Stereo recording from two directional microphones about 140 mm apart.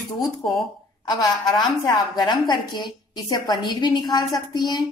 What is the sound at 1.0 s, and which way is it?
A woman's voice, 30° left (ahead or behind).